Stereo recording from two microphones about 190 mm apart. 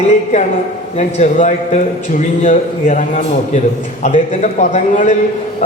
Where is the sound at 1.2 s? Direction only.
35° left (ahead or behind).